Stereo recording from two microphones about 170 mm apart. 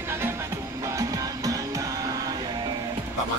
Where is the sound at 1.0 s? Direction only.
20° right (ahead or behind).